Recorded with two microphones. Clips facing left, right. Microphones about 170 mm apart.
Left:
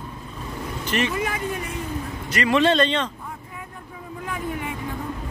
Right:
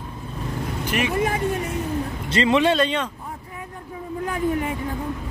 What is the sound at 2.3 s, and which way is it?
Speech, 25° right (ahead or behind).